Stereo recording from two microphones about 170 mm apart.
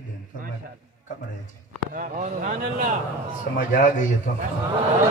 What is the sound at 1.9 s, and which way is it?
Speech, 50° right (ahead or behind).